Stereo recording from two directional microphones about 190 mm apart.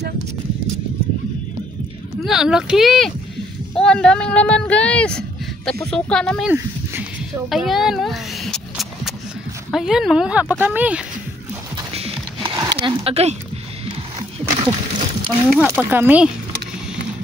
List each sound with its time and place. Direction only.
2.2 s speech: 5° right (ahead or behind)
6.5 s a sound: 10° right (ahead or behind)
9.7 s speech: centre (ahead or behind)
11.7 s horse: 30° right (ahead or behind)
12.5 s speech: 25° right (ahead or behind)
15.2 s speech: centre (ahead or behind)
15.7 s speech: 10° right (ahead or behind)